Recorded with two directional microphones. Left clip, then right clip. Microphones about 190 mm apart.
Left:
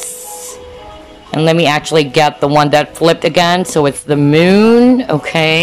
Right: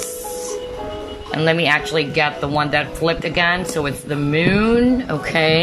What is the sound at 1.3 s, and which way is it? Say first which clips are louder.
Speech: left 5 dB; 20° left (ahead or behind).